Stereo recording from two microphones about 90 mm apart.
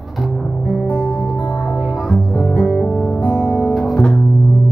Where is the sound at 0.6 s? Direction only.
20° left (ahead or behind).